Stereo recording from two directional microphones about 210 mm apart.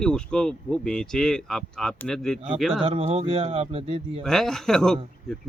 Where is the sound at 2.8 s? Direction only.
25° right (ahead or behind).